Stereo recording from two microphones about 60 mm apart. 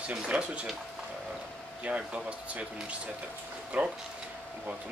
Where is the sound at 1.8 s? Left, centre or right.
Centre.